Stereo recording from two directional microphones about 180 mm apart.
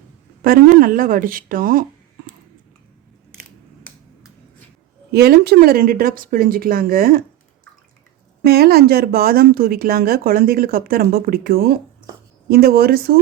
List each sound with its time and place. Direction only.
0.4 s speech: 55° right (ahead or behind)
5.1 s speech: 60° right (ahead or behind)
8.4 s speech: 60° right (ahead or behind)